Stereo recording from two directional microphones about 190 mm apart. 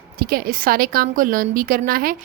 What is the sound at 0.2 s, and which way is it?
A woman's voice, 50° right (ahead or behind).